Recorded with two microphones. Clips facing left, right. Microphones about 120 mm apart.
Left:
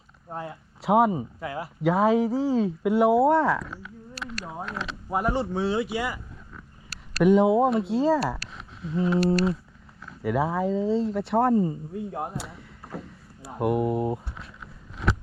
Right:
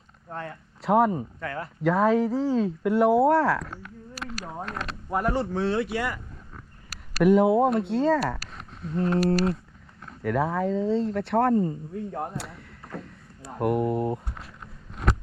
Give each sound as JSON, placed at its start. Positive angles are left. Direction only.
{"t": 0.3, "sound": "speech", "side_deg": 10}
{"t": 7.2, "sound": "speech", "side_deg": 0}
{"t": 10.2, "sound": "speech", "side_deg": 5}
{"t": 14.6, "sound": "a sound", "side_deg": -50}